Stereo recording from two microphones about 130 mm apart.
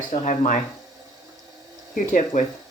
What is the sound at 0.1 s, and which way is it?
Speech, 75° left (ahead or behind).